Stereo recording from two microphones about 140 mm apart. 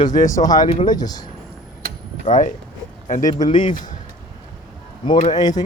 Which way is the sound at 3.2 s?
30° left (ahead or behind).